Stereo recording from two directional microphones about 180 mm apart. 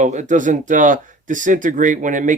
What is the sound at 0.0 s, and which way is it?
Speech, 40° right (ahead or behind).